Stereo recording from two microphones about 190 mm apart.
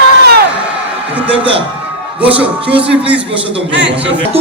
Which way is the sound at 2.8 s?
5° right (ahead or behind).